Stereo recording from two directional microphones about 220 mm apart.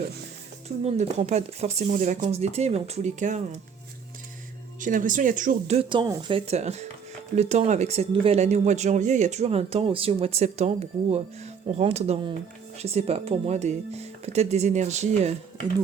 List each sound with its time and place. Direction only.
0.9 s speech: 30° right (ahead or behind)
4.8 s speech: 35° right (ahead or behind)